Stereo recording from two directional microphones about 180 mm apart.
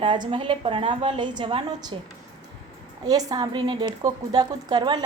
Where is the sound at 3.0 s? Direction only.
20° right (ahead or behind).